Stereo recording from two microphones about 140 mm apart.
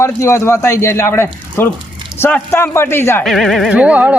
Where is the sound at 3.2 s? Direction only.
Centre (ahead or behind).